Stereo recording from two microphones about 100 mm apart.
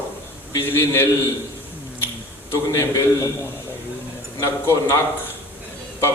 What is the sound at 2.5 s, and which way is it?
Speech, 25° left (ahead or behind).